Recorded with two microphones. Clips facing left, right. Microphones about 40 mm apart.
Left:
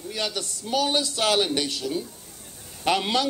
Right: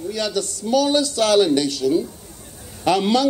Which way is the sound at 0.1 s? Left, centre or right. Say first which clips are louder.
Right 5 dB; left.